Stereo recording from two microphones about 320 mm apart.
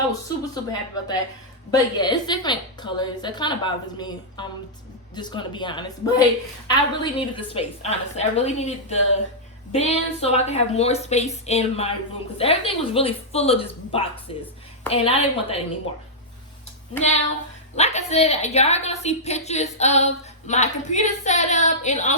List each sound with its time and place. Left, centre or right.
0.1 s a woman's voice: centre
17.7 s a woman's voice: centre